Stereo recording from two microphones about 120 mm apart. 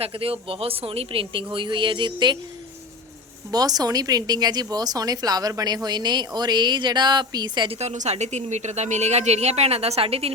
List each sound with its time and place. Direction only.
0.0 s speech: 50° right (ahead or behind)
3.5 s speech: 30° right (ahead or behind)
7.8 s a woman's voice: 70° right (ahead or behind); by 10.3 s 55° right (ahead or behind)